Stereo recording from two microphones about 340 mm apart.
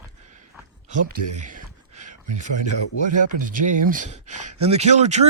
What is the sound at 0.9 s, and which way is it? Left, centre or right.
Speech, right.